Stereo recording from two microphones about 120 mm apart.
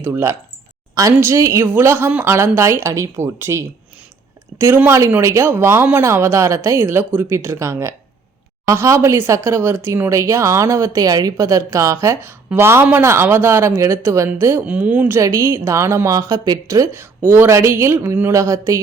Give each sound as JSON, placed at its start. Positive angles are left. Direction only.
{"t": 0.0, "sound": "speech", "side_deg": -20}